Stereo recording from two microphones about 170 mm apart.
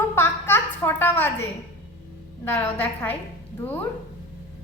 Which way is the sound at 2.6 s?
10° left (ahead or behind).